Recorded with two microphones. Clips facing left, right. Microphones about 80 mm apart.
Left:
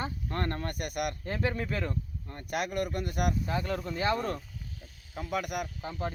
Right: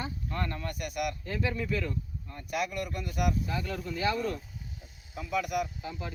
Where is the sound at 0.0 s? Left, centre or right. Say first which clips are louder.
Left 2 dB; left.